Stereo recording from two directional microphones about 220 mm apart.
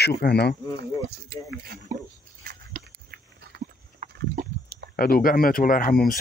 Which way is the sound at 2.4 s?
45° right (ahead or behind).